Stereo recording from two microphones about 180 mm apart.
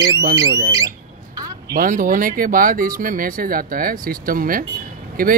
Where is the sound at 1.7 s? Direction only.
50° right (ahead or behind).